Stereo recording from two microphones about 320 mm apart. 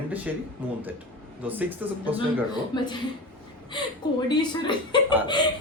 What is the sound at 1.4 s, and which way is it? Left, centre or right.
Speech, centre.